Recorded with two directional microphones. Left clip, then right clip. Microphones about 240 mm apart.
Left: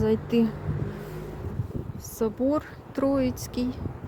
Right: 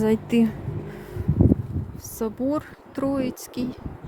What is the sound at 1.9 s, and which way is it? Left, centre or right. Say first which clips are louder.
Speech: left 1 dB; centre.